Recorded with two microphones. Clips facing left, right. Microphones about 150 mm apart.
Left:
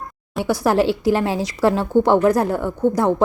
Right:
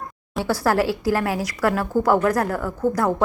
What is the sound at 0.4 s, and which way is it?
Speech, 20° left (ahead or behind).